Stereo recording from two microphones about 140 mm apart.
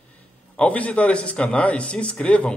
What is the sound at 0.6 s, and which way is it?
A man's voice, 10° left (ahead or behind).